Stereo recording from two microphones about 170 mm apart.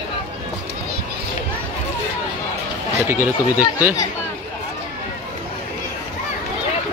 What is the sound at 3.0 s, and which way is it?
Speech, 15° right (ahead or behind).